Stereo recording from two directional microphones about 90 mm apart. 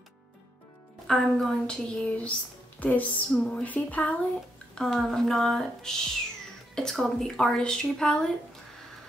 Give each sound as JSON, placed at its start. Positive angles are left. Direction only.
{"t": 1.0, "sound": "speech", "side_deg": 5}
{"t": 4.7, "sound": "speech", "side_deg": 5}